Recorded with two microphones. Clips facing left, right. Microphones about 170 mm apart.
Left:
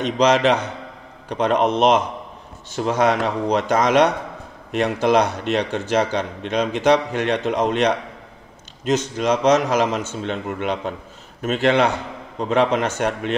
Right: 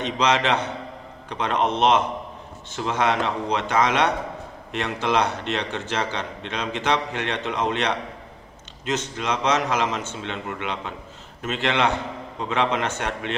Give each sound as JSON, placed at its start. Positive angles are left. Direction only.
{"t": 0.0, "sound": "a man's voice", "side_deg": 40}
{"t": 8.8, "sound": "a man's voice", "side_deg": 40}